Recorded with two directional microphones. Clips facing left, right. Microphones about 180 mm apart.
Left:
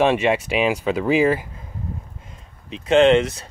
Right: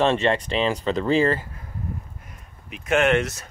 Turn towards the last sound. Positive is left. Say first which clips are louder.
# left 6 dB
turn(degrees=25)  # may be behind; listen again after turning